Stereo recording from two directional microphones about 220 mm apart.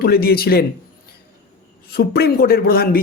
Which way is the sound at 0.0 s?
45° left (ahead or behind).